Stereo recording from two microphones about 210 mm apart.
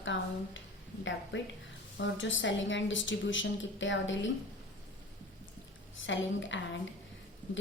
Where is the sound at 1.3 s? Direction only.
60° left (ahead or behind).